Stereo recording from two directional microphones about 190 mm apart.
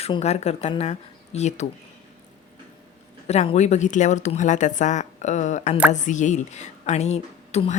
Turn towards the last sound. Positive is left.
turn(degrees=35)  # may be behind; listen again after turning